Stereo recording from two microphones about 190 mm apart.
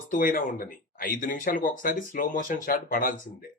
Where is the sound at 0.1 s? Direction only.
45° left (ahead or behind).